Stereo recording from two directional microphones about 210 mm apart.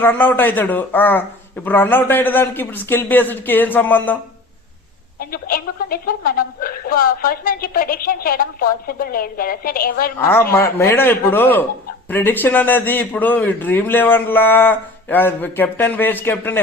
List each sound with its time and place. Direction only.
0.0 s a man's voice: 10° left (ahead or behind)
5.2 s a woman's voice: 45° left (ahead or behind)
10.2 s a man's voice: 10° left (ahead or behind)